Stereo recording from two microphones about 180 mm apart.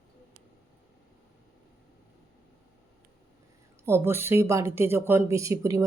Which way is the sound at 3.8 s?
15° right (ahead or behind).